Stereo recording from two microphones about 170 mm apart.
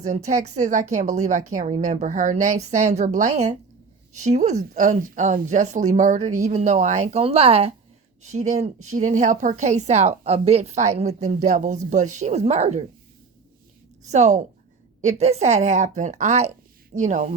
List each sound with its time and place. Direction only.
0.0 s a woman's voice: 45° right (ahead or behind)
14.0 s a woman's voice: 40° right (ahead or behind)